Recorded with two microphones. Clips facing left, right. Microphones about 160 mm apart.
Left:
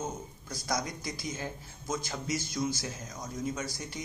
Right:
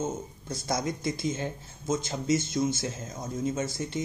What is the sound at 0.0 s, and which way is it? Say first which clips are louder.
Speech: right 5 dB; 25° right (ahead or behind).